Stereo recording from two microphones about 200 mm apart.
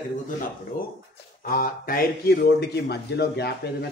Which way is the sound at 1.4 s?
45° left (ahead or behind).